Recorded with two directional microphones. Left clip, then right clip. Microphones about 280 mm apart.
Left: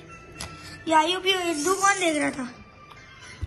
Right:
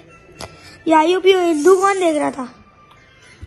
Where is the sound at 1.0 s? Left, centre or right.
Centre.